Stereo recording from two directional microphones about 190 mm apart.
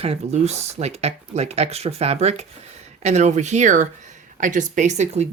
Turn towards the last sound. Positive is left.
turn(degrees=-35)  # may be behind; listen again after turning